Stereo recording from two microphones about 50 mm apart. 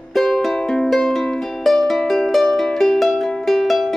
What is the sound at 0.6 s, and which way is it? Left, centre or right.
Music, centre.